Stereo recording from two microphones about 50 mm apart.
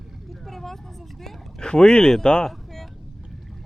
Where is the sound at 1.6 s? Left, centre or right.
Centre.